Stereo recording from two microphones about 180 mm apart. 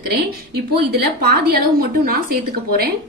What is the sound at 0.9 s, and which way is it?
A woman's voice, 60° right (ahead or behind).